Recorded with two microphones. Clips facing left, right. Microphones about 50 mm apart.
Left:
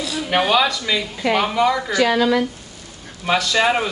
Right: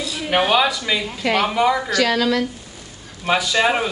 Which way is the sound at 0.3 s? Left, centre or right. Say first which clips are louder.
Even; centre.